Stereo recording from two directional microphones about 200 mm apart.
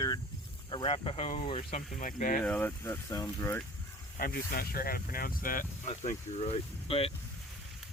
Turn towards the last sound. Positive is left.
turn(degrees=30)  # may be behind; listen again after turning